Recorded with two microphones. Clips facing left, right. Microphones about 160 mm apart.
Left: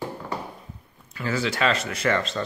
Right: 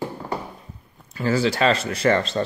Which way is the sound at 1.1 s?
35° right (ahead or behind).